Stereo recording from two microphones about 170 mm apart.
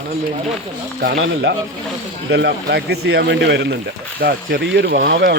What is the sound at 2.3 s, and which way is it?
Speech, 90° right.